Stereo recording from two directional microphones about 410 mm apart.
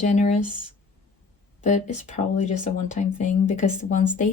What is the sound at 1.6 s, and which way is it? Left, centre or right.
Speech, centre.